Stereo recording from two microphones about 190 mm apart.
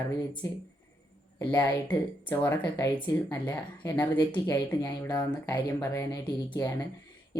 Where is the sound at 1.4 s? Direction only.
10° left (ahead or behind).